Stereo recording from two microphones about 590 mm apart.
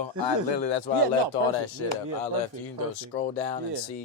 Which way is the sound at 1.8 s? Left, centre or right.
Left.